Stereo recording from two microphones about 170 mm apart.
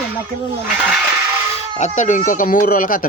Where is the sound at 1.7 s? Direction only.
45° left (ahead or behind).